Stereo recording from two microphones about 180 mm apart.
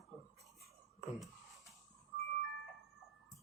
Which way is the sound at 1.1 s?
Centre (ahead or behind).